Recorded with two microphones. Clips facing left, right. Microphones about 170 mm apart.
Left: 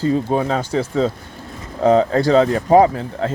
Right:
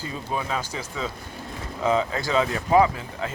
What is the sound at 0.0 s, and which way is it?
Speech, 35° left (ahead or behind).